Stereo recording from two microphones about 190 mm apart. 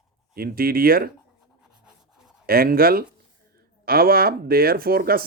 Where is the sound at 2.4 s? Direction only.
50° right (ahead or behind).